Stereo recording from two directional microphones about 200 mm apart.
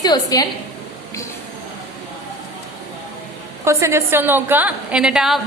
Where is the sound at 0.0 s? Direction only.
20° left (ahead or behind).